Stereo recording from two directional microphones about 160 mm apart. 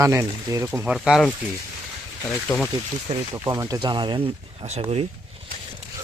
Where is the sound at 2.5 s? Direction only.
20° left (ahead or behind).